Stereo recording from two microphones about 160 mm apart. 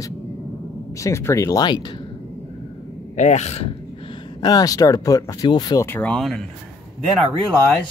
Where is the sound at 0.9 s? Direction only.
20° left (ahead or behind).